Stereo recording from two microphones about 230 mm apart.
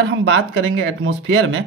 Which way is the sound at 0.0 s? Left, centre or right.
Right.